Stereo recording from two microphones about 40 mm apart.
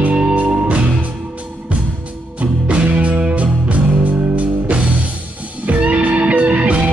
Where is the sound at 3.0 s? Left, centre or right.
Right.